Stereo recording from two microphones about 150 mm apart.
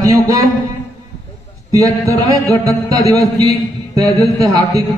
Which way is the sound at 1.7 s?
20° right (ahead or behind).